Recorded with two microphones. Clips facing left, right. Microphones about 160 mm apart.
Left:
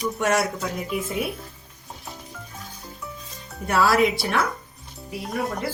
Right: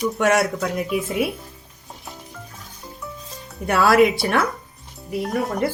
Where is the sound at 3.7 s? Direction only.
60° right (ahead or behind).